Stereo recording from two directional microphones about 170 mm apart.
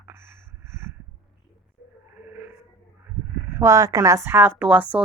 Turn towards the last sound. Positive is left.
turn(degrees=-10)  # may be behind; listen again after turning